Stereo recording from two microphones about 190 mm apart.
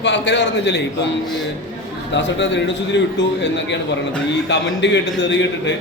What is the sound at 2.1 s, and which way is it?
Speech, 70° left (ahead or behind).